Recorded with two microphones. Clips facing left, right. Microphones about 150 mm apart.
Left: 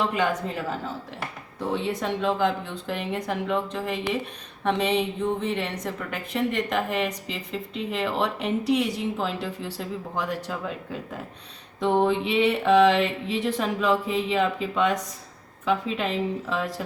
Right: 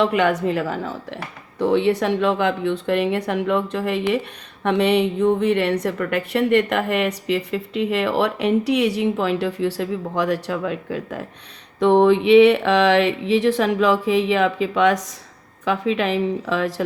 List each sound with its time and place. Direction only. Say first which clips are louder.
0.0 s a woman's voice: right 7 dB; 70° right (ahead or behind)